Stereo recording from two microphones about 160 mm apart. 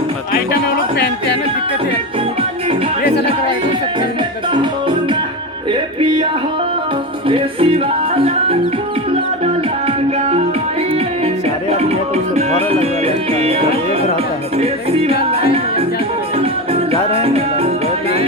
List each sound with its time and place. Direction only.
6.0 s music: 30° right (ahead or behind)
7.3 s music: 35° right (ahead or behind)
11.7 s music: 40° right (ahead or behind)
17.1 s music: 35° right (ahead or behind)